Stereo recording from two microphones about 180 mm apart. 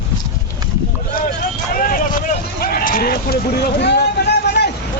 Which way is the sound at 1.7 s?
50° left (ahead or behind).